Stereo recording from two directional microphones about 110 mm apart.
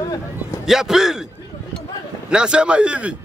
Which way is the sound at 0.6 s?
5° right (ahead or behind).